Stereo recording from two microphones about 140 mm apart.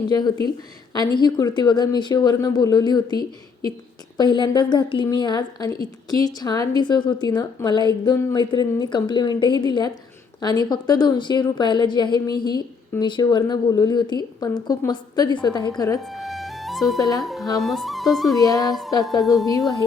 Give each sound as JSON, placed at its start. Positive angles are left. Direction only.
{"t": 0.1, "sound": "a woman's voice", "side_deg": 30}
{"t": 16.0, "sound": "music", "side_deg": 0}
{"t": 17.0, "sound": "a woman's voice", "side_deg": 25}
{"t": 17.2, "sound": "speech", "side_deg": 0}
{"t": 18.3, "sound": "a woman's voice", "side_deg": 25}
{"t": 18.7, "sound": "speech", "side_deg": 0}